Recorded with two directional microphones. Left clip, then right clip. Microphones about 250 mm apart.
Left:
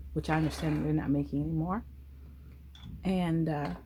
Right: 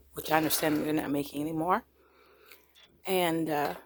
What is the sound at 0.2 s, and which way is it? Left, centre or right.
Speech, right.